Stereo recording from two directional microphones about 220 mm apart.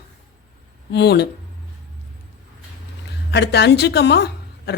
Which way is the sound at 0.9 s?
50° left (ahead or behind).